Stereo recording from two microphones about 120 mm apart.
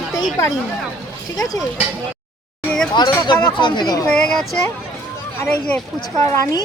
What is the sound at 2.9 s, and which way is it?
Speech, 40° left (ahead or behind).